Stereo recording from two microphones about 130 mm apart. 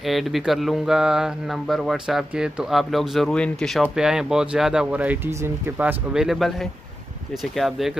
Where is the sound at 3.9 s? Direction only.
5° right (ahead or behind).